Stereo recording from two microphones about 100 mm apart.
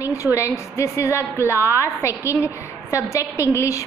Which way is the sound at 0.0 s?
30° left (ahead or behind).